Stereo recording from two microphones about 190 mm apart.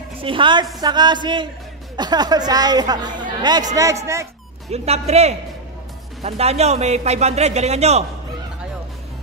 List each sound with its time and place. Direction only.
0.2 s a man's voice: 25° right (ahead or behind)
4.6 s a man's voice: 35° right (ahead or behind)